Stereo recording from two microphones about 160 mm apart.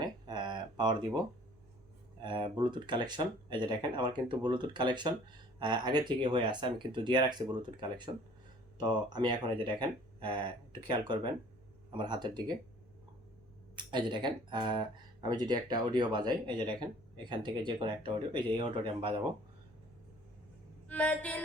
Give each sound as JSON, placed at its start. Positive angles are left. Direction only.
{"t": 0.0, "sound": "a sound", "side_deg": -25}
{"t": 2.2, "sound": "speech", "side_deg": -30}
{"t": 13.7, "sound": "speech", "side_deg": -30}
{"t": 20.8, "sound": "speech", "side_deg": 10}